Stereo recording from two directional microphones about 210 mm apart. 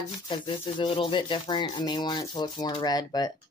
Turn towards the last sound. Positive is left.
turn(degrees=20)  # may be behind; listen again after turning